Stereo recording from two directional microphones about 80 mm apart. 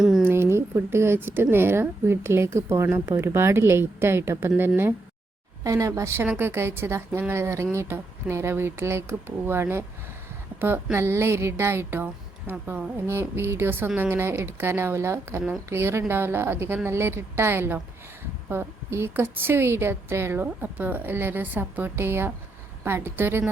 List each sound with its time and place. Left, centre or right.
0.2 s a woman's voice: right
5.6 s a woman's voice: right
6.2 s a woman's voice: right